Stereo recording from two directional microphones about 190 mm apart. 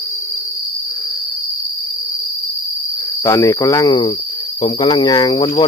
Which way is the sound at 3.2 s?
15° left (ahead or behind).